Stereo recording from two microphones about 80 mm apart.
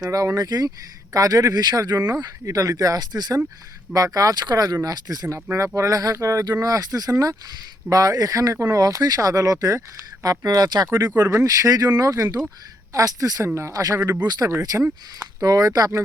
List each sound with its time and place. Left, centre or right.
0.1 s speech: right
3.9 s speech: right
5.5 s speech: right
10.4 s speech: right
14.3 s speech: right
14.6 s speech: right